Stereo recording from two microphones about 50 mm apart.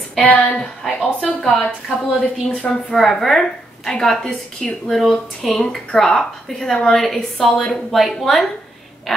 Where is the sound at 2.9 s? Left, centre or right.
Centre.